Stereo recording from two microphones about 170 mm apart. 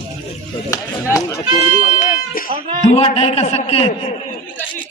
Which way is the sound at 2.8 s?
40° left (ahead or behind).